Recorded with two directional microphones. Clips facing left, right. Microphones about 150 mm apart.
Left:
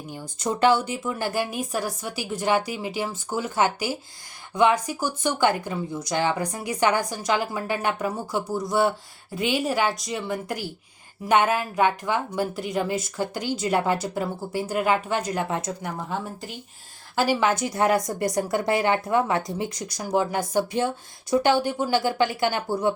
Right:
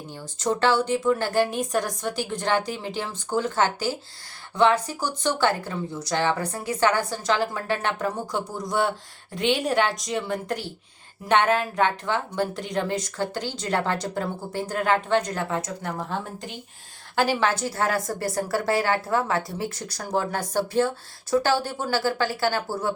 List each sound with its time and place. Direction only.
0.1 s a woman's voice: 15° left (ahead or behind)
17.2 s a woman's voice: 10° left (ahead or behind)